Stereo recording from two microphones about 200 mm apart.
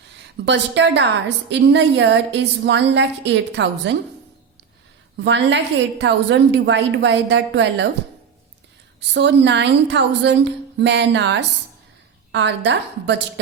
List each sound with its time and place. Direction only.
0.4 s a woman's voice: 60° right (ahead or behind)
5.1 s a woman's voice: 60° right (ahead or behind)
9.1 s a woman's voice: 60° right (ahead or behind)